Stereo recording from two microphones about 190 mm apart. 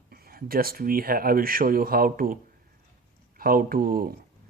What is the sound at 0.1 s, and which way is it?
Speech, 50° right (ahead or behind).